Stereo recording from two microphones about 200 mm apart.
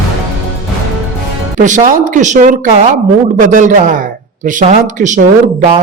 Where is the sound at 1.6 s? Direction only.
40° right (ahead or behind).